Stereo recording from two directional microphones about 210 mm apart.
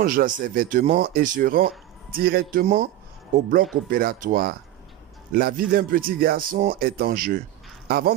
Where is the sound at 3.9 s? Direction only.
45° right (ahead or behind).